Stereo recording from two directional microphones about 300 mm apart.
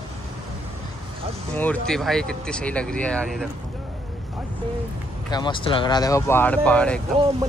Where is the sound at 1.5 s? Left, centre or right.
Centre.